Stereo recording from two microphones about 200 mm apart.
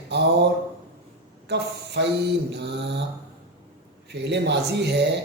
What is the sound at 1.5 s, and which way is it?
Speech, 60° right (ahead or behind).